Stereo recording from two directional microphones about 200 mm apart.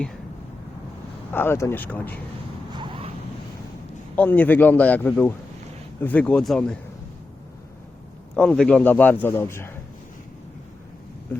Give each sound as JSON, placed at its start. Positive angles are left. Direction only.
{"t": 1.3, "sound": "a man's voice", "side_deg": 10}
{"t": 2.7, "sound": "vehicle", "side_deg": -25}
{"t": 4.1, "sound": "a man's voice", "side_deg": 10}
{"t": 8.4, "sound": "a man's voice", "side_deg": 5}